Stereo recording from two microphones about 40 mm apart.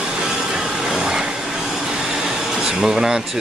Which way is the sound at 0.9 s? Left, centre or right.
Centre.